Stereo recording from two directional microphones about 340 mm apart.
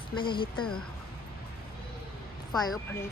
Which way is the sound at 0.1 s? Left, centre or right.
Centre.